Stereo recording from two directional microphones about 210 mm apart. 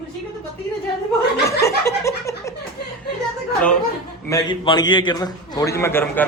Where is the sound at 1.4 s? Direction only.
15° left (ahead or behind).